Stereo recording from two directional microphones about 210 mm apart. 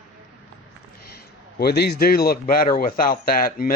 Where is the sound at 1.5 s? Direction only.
50° left (ahead or behind).